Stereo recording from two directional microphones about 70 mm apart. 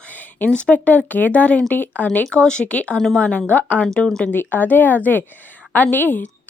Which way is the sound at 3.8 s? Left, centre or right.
Centre.